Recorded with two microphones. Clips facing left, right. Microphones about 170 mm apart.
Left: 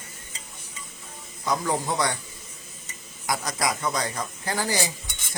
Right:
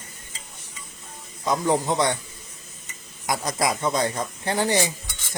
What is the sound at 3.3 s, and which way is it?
Speech, 25° right (ahead or behind).